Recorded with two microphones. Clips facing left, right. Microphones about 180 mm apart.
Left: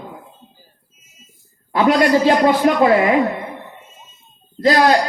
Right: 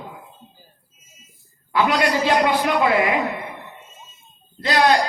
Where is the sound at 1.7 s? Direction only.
45° left (ahead or behind).